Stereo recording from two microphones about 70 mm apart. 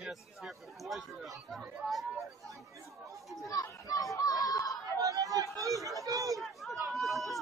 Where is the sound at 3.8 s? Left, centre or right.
Left.